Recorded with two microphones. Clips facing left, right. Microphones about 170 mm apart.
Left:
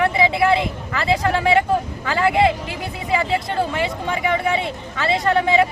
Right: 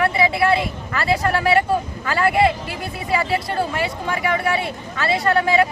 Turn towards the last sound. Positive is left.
turn(degrees=20)  # may be behind; listen again after turning